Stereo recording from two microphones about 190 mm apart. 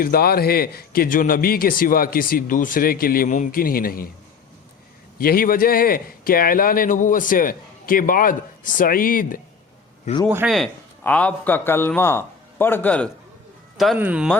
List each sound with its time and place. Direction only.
0.0 s a man's voice: 50° left (ahead or behind)
5.1 s a man's voice: 50° left (ahead or behind)
10.2 s a man's voice: 5° right (ahead or behind)
13.7 s speech: 5° right (ahead or behind)